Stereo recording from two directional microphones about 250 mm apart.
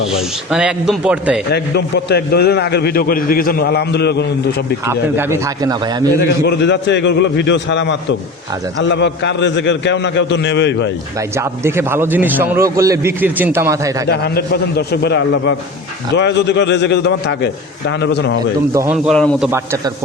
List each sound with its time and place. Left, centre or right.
0.1 s a man's voice: centre
1.5 s a man's voice: left
4.9 s a man's voice: centre
6.4 s a man's voice: left
11.3 s a man's voice: centre
14.1 s a man's voice: left
18.7 s a man's voice: centre
19.0 s a man's voice: centre
19.5 s a man's voice: centre